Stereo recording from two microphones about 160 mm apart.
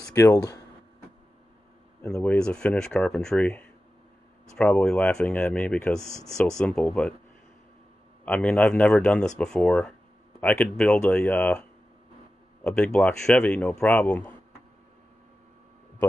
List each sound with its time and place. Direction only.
0.1 s speech: 20° left (ahead or behind)
2.0 s speech: 15° left (ahead or behind)
8.3 s speech: 10° left (ahead or behind)
12.6 s speech: 5° left (ahead or behind)